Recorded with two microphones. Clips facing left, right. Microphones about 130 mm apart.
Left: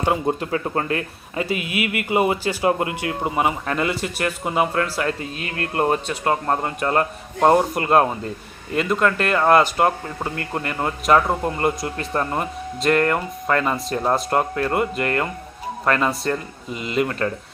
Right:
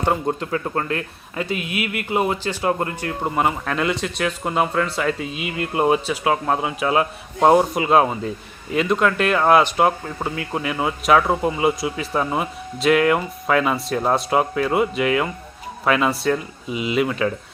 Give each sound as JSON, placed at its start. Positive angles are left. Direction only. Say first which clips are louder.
{"t": 0.0, "sound": "a man's voice", "louder": "even", "side_deg": 5}